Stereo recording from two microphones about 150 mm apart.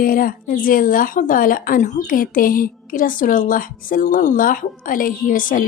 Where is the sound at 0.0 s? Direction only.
70° left (ahead or behind).